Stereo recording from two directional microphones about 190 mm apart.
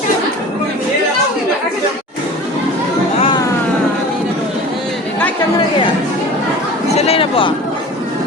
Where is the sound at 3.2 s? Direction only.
25° left (ahead or behind).